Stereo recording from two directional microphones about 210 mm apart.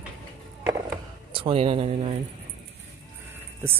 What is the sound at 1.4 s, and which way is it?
Speech, 25° right (ahead or behind).